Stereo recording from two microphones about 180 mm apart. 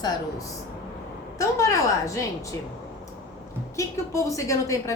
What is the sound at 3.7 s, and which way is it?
A woman's voice, 15° left (ahead or behind).